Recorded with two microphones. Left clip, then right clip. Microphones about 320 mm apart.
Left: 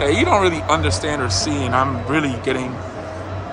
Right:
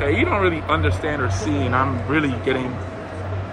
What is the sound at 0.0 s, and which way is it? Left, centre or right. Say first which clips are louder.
Speech: left 4 dB; centre.